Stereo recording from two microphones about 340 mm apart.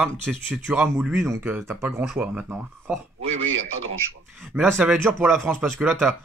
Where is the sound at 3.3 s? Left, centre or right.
Right.